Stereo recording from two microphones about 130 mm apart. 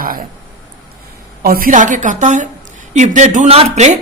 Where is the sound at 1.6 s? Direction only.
80° right.